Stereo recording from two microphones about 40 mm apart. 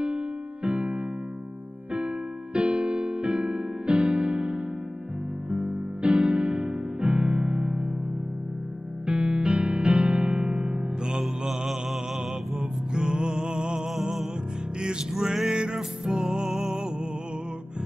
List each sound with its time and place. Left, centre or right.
0.0 s electric piano: right
5.5 s music: right
9.0 s music: right
11.4 s mantra: centre
12.5 s music: centre
13.8 s music: centre
14.8 s music: centre